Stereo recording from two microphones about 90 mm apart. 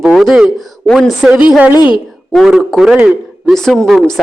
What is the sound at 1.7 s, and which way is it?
Speech, 55° left (ahead or behind).